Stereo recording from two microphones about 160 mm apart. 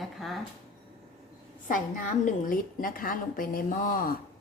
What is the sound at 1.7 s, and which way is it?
A woman's voice, 55° left (ahead or behind).